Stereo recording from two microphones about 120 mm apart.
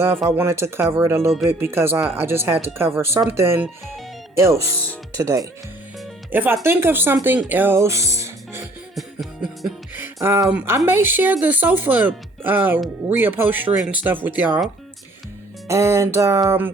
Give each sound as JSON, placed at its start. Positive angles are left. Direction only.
{"t": 0.3, "sound": "speech", "side_deg": -20}
{"t": 6.3, "sound": "speech", "side_deg": -15}
{"t": 9.0, "sound": "music", "side_deg": 0}
{"t": 10.2, "sound": "speech", "side_deg": -20}
{"t": 15.6, "sound": "speech", "side_deg": -25}